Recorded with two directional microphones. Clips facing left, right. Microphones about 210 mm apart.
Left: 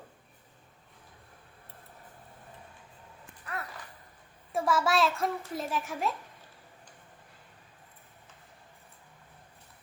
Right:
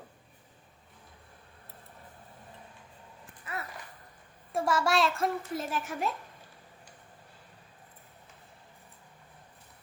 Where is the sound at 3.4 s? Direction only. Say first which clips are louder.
Even; centre (ahead or behind).